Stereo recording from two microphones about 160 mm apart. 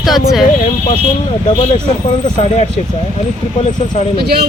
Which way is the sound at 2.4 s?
40° left (ahead or behind).